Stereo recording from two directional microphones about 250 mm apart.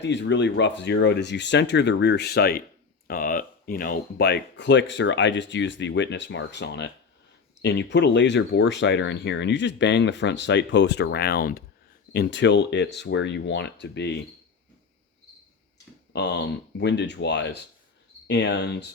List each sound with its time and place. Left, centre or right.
0.0 s speech: left
16.1 s speech: left